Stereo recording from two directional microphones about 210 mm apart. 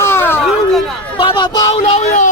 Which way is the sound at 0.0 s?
10° left (ahead or behind).